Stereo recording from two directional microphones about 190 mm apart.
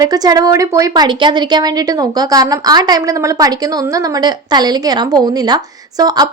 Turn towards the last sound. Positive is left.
turn(degrees=-20)  # may be behind; listen again after turning